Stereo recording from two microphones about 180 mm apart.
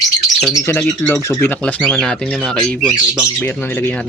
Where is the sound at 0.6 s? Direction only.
10° left (ahead or behind).